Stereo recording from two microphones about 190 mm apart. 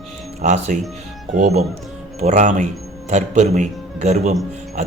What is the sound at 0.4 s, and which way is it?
Speech, 40° right (ahead or behind).